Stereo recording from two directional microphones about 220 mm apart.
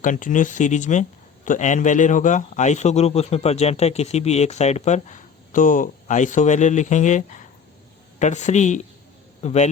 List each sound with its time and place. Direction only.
0.0 s a man's voice: 35° left (ahead or behind)